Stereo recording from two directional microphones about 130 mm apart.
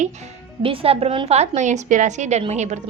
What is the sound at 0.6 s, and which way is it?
A woman's voice, 45° right (ahead or behind).